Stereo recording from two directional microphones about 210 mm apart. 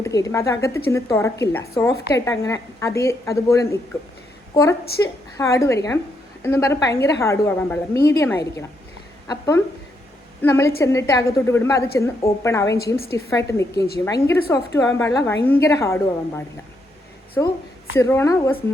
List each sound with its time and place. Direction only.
0.0 s a woman's voice: 15° left (ahead or behind)